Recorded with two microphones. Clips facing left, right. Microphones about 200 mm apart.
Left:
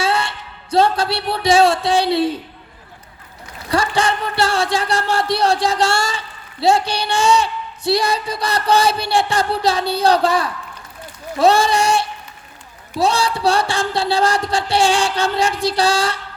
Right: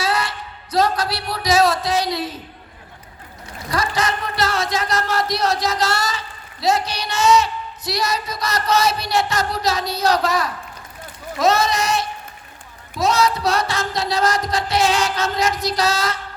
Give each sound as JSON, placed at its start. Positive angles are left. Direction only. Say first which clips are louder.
{"t": 0.0, "sound": "speech", "louder": "left 2 dB", "side_deg": 25}
{"t": 3.7, "sound": "speech", "louder": "left 4 dB", "side_deg": 30}